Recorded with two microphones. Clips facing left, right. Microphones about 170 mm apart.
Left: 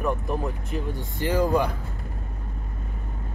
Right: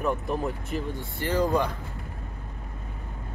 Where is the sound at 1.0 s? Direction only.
15° left (ahead or behind).